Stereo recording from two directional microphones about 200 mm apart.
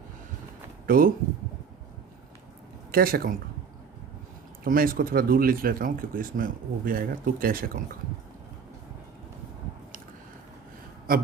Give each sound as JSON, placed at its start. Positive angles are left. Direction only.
{"t": 0.9, "sound": "speech", "side_deg": -45}
{"t": 2.9, "sound": "speech", "side_deg": -50}
{"t": 4.6, "sound": "speech", "side_deg": -45}